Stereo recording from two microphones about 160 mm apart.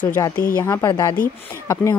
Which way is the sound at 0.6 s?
15° left (ahead or behind).